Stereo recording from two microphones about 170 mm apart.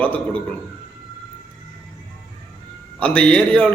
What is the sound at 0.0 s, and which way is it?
Speech, 10° left (ahead or behind).